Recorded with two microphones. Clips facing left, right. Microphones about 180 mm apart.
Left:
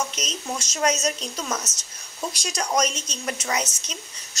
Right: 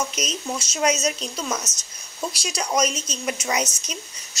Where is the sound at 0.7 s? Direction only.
5° right (ahead or behind).